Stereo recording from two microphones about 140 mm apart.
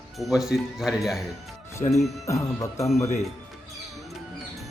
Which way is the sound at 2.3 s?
20° left (ahead or behind).